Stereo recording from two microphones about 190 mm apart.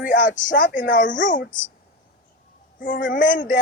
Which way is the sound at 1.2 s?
45° left (ahead or behind).